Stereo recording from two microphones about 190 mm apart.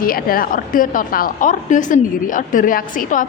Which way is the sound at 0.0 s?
50° left (ahead or behind).